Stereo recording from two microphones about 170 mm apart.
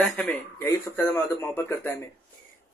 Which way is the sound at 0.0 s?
5° left (ahead or behind).